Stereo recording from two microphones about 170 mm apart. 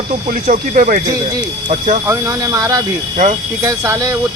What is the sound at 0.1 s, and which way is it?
Speech, 50° right (ahead or behind).